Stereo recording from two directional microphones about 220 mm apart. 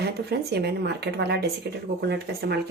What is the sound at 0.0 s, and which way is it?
Speech, 50° right (ahead or behind).